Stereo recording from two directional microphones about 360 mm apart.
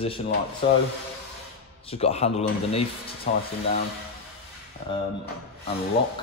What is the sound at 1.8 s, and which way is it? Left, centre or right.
Speech, centre.